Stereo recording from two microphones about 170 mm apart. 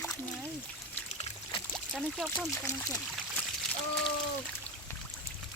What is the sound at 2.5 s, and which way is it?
Speech, 15° left (ahead or behind).